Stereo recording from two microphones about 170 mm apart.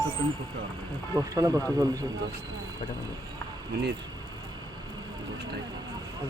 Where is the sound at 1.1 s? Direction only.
20° right (ahead or behind).